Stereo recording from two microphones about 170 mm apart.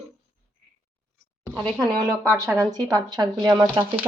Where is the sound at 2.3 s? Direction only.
15° right (ahead or behind).